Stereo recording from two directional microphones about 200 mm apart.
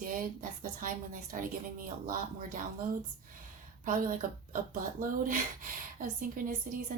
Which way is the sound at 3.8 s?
40° right (ahead or behind).